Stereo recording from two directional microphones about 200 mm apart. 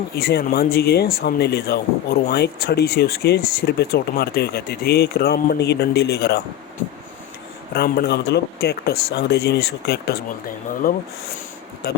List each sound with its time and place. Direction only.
0.2 s speech: 55° left (ahead or behind)
7.7 s speech: 55° left (ahead or behind)